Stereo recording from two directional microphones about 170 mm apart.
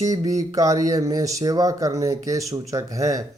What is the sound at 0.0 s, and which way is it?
Speech, 20° right (ahead or behind).